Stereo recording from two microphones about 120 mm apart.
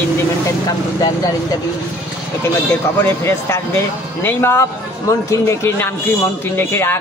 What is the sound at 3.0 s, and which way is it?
Speech, 20° left (ahead or behind).